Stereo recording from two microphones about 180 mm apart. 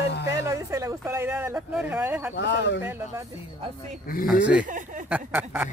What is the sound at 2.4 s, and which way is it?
Speech, 75° left (ahead or behind).